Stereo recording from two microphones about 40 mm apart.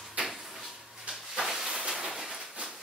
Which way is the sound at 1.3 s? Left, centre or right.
Centre.